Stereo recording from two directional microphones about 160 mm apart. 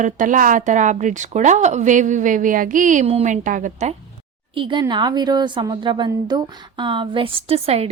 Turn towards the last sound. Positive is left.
turn(degrees=-40)  # may be behind; listen again after turning